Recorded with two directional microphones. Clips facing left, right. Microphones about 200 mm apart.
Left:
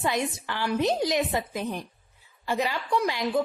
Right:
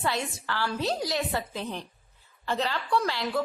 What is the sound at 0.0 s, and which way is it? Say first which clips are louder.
A woman's voice: left 3 dB; 15° left (ahead or behind).